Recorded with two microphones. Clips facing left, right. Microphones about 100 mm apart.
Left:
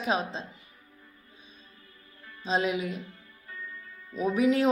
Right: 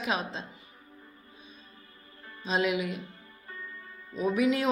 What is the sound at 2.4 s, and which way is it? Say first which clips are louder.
Speech: even; 30° left (ahead or behind).